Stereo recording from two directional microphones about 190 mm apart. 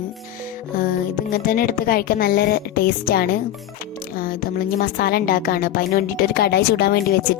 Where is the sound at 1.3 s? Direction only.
50° left (ahead or behind).